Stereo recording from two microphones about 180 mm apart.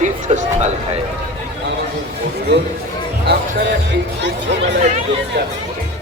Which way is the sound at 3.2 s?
70° right (ahead or behind).